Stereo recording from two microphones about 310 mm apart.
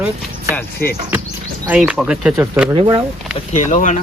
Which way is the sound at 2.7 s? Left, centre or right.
Centre.